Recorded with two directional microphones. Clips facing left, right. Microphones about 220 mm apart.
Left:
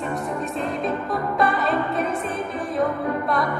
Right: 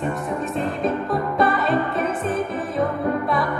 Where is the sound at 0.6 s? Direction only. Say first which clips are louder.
Right 3 dB; centre (ahead or behind).